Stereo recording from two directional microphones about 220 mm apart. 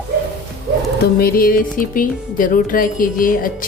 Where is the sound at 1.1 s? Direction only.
40° left (ahead or behind).